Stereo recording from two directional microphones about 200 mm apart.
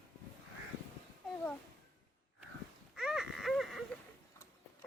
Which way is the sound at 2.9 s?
Centre (ahead or behind).